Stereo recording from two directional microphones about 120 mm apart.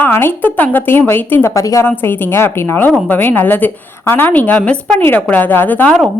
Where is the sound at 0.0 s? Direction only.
20° left (ahead or behind).